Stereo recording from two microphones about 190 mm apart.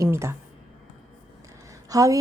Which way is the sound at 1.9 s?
20° right (ahead or behind).